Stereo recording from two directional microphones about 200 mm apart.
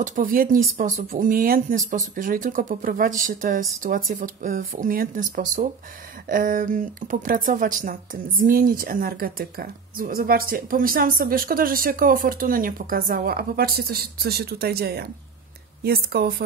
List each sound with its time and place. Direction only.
0.0 s speech: 45° right (ahead or behind)